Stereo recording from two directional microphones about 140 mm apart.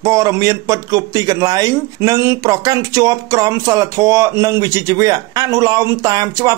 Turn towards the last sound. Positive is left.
turn(degrees=-25)  # may be behind; listen again after turning